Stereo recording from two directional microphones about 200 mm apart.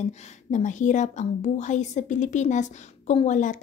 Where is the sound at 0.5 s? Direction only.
40° left (ahead or behind).